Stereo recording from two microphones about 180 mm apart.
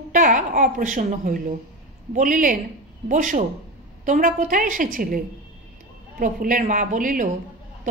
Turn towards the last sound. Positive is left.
turn(degrees=-45)  # may be behind; listen again after turning